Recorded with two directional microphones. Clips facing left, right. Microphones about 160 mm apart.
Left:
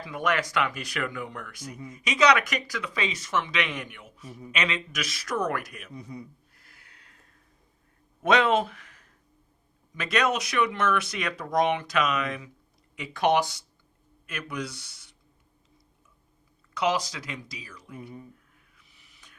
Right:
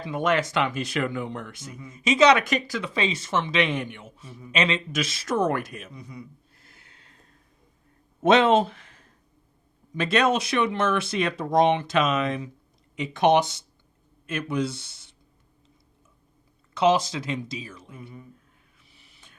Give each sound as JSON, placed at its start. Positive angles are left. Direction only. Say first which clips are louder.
{"t": 0.0, "sound": "speech", "louder": "right 4 dB", "side_deg": -25}
{"t": 5.9, "sound": "speech", "louder": "left 1 dB", "side_deg": 30}
{"t": 6.6, "sound": "a sound", "louder": "right 2 dB", "side_deg": -25}
{"t": 8.2, "sound": "speech", "louder": "right 4 dB", "side_deg": -25}
{"t": 16.7, "sound": "speech", "louder": "right 6 dB", "side_deg": -25}
{"t": 18.8, "sound": "a sound", "louder": "right 3 dB", "side_deg": -30}